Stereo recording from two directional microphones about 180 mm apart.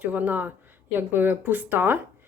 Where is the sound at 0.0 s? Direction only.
10° right (ahead or behind).